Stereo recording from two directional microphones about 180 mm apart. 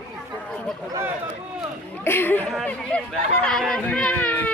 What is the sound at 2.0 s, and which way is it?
Speech, 10° left (ahead or behind).